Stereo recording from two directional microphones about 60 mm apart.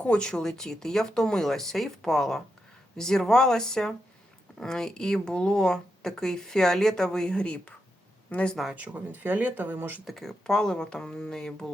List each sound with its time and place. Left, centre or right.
0.0 s a woman's voice: centre
8.7 s speech: right
10.1 s a woman's voice: centre